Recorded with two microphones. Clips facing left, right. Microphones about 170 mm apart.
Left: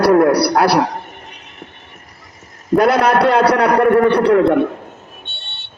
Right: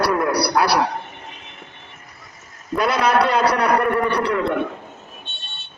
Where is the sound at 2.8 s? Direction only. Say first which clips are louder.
Left 6 dB; 50° left (ahead or behind).